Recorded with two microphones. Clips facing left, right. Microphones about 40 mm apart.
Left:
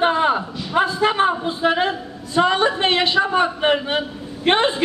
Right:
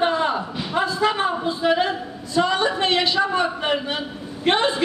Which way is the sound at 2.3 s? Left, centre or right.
Left.